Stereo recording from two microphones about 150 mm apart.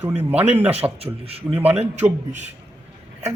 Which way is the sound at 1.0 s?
40° right (ahead or behind).